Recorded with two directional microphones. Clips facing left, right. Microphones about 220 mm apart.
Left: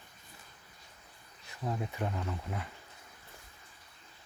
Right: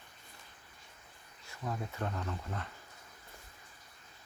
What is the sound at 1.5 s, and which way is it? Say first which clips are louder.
Speech: left 3 dB; 15° left (ahead or behind).